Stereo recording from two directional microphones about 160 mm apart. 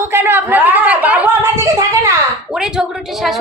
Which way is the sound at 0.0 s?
15° right (ahead or behind).